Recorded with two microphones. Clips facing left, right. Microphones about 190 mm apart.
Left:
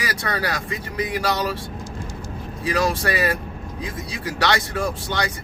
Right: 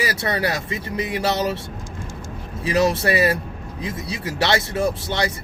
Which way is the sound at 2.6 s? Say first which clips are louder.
Right 3 dB; 25° right (ahead or behind).